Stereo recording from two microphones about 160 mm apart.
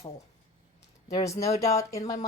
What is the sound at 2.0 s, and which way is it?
Speech, 45° left (ahead or behind).